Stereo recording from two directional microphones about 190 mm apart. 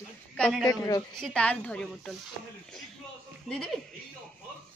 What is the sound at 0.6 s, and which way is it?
Speech, 20° left (ahead or behind).